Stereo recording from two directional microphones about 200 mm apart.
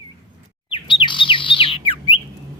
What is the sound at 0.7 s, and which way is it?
Chirp, 25° left (ahead or behind).